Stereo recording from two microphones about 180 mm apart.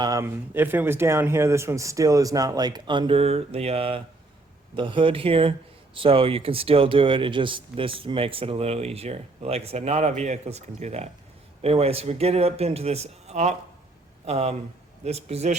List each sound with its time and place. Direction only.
0.0 s speech: 15° right (ahead or behind); by 15.5 s 35° right (ahead or behind)